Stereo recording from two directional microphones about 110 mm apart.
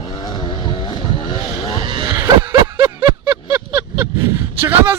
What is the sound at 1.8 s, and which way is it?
Vehicle, 45° right (ahead or behind).